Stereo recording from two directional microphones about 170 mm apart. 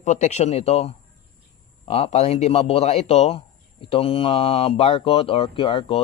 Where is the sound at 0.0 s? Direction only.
45° left (ahead or behind).